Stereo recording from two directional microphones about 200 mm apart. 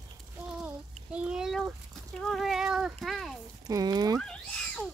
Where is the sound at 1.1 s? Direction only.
5° right (ahead or behind).